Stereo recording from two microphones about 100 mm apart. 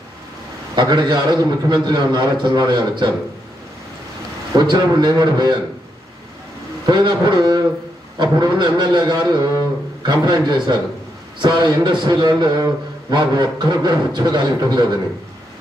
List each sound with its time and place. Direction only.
0.7 s a man's voice: 50° right (ahead or behind)
4.6 s a man's voice: 45° right (ahead or behind)
6.9 s a man's voice: 50° right (ahead or behind)